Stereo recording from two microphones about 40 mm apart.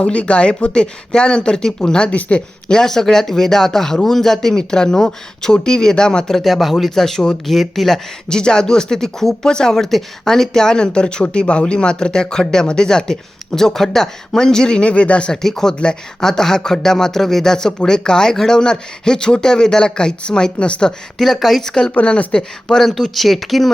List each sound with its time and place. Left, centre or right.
0.0 s speech: left
2.0 s speech: left
2.8 s speech: centre
6.4 s speech: centre
8.3 s speech: centre
15.3 s speech: centre
21.2 s speech: centre
21.6 s speech: centre
21.9 s speech: left
22.7 s speech: centre
23.1 s speech: centre